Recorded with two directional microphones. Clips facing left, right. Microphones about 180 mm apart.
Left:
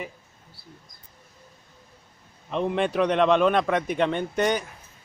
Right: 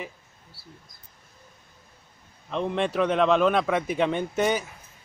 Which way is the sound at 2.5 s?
5° left (ahead or behind).